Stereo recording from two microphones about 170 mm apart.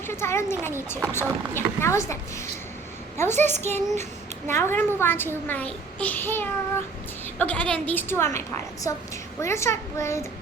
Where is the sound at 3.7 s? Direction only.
40° right (ahead or behind).